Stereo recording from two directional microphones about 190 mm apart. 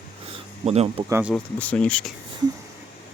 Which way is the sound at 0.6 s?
35° right (ahead or behind).